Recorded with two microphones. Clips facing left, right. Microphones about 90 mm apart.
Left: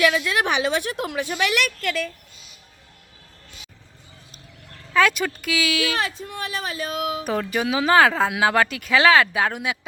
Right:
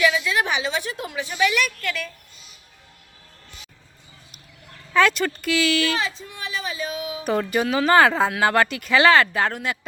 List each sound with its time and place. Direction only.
0.0 s a woman's voice: 55° left (ahead or behind)
4.9 s speech: 5° left (ahead or behind)
6.0 s a woman's voice: 55° left (ahead or behind)
7.3 s speech: centre (ahead or behind)